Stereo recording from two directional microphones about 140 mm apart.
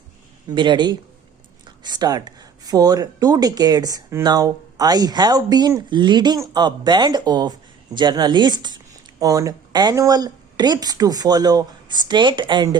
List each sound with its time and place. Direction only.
0.5 s speech: 35° right (ahead or behind)